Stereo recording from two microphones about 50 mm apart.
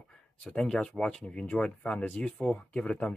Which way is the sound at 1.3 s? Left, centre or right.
Left.